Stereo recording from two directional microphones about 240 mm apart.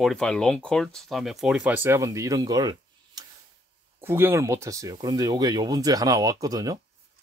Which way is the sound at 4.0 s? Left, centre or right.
Centre.